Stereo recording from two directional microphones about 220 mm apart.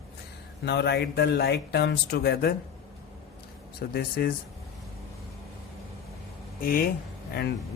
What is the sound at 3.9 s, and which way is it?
Speech, 45° left (ahead or behind).